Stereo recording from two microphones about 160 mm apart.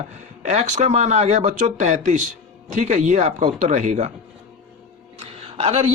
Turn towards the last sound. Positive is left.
turn(degrees=-40)  # may be behind; listen again after turning